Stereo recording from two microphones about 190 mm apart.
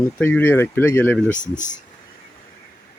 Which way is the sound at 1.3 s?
40° left (ahead or behind).